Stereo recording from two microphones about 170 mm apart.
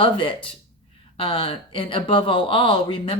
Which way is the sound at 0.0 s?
30° left (ahead or behind).